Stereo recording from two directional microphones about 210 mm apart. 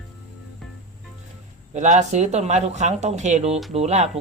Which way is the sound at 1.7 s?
35° right (ahead or behind).